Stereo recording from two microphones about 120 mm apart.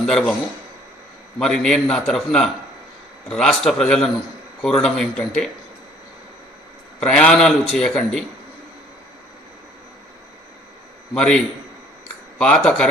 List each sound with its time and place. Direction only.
0.0 s a man's voice: 5° left (ahead or behind)
1.4 s a man's voice: 5° left (ahead or behind)
7.0 s a man's voice: 10° left (ahead or behind)
11.1 s a man's voice: 5° left (ahead or behind)